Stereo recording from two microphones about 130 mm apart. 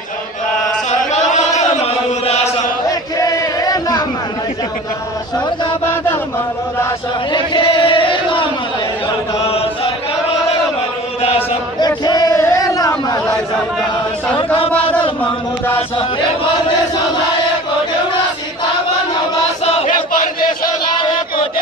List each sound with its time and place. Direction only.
0.8 s chant: 60° left (ahead or behind)
2.9 s chant: 30° left (ahead or behind)
7.3 s chant: 40° left (ahead or behind)
11.8 s a sound: 30° left (ahead or behind)
16.0 s chant: 40° left (ahead or behind)
19.6 s chant: 50° left (ahead or behind)
20.1 s a sound: 90° left
21.0 s chant: 40° left (ahead or behind)